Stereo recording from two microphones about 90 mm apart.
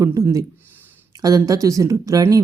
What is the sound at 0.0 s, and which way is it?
Speech, 40° right (ahead or behind).